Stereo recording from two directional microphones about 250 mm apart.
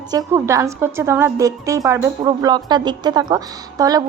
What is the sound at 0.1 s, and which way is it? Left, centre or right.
A woman's voice, centre.